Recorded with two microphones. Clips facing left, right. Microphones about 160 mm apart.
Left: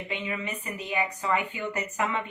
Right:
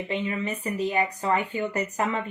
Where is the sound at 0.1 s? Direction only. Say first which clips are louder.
Right 5 dB; 35° right (ahead or behind).